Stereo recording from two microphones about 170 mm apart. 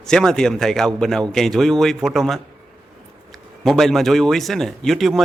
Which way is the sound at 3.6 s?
Centre (ahead or behind).